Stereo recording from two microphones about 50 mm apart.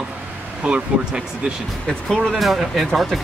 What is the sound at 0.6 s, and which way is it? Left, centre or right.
Speech, right.